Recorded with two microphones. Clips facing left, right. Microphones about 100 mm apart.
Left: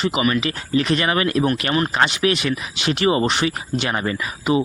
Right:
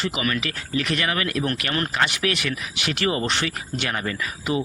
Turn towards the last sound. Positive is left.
turn(degrees=25)  # may be behind; listen again after turning